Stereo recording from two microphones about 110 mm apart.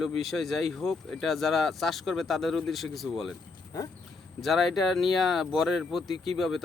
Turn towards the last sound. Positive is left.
turn(degrees=0)  # may be behind; listen again after turning